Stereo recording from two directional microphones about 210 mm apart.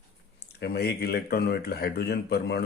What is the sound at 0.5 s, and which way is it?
Speech, 50° left (ahead or behind).